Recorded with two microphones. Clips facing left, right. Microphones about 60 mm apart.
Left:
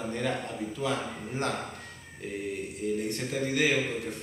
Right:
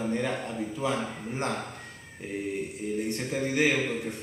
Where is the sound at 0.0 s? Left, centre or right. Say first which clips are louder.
Right 3 dB; centre.